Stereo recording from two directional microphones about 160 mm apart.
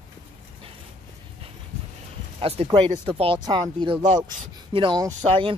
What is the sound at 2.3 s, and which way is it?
Speech, 40° right (ahead or behind).